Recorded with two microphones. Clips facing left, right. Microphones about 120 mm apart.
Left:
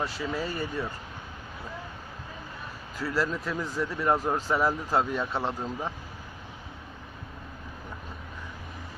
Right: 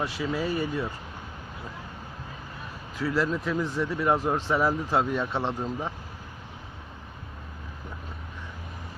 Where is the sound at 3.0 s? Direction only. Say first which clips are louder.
Right 2 dB; centre (ahead or behind).